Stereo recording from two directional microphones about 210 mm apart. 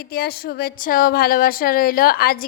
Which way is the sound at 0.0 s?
45° left (ahead or behind).